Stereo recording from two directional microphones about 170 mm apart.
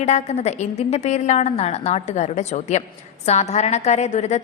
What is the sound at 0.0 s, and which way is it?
A woman's voice, 45° left (ahead or behind).